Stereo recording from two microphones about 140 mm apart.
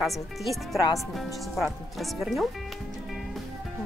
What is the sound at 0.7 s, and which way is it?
Speech, 25° left (ahead or behind).